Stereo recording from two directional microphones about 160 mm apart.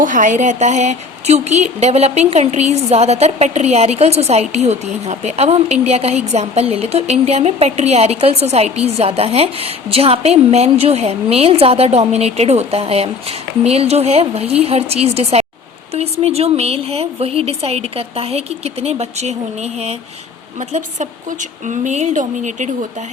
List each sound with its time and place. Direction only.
0.0 s a woman's voice: 55° right (ahead or behind)